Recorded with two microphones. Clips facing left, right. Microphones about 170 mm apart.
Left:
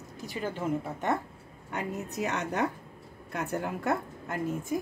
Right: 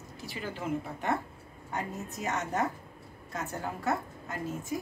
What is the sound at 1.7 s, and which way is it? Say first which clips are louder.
A woman's voice: left 2 dB; 65° left (ahead or behind).